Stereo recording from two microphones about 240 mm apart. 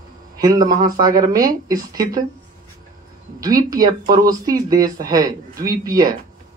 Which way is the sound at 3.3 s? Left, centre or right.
Centre.